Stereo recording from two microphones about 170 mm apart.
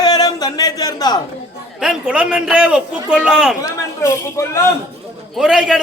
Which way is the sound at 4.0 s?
15° left (ahead or behind).